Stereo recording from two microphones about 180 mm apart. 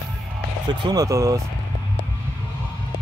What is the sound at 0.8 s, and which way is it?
Speech, 20° right (ahead or behind).